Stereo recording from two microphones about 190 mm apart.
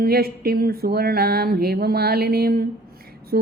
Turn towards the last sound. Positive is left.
turn(degrees=-55)  # may be behind; listen again after turning